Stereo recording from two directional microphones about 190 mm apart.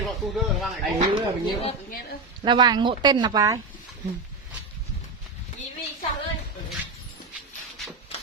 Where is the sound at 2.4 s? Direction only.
25° right (ahead or behind).